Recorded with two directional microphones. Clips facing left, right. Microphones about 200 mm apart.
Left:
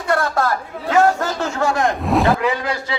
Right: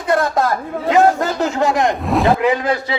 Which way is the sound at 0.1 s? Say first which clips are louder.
Right 3 dB; 20° right (ahead or behind).